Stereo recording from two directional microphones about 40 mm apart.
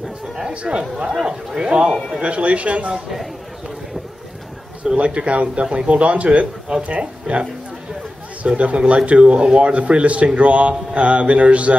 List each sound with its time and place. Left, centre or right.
0.5 s speech: right
4.9 s speech: right
8.5 s speech: right